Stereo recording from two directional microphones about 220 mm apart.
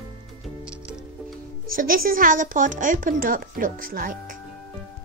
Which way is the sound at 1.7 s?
40° right (ahead or behind).